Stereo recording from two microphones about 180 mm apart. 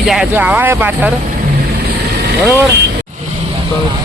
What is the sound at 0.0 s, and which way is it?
Speech, centre (ahead or behind).